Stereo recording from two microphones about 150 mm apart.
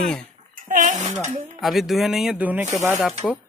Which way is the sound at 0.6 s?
55° right (ahead or behind).